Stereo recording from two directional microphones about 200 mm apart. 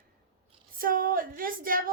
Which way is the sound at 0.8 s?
45° right (ahead or behind).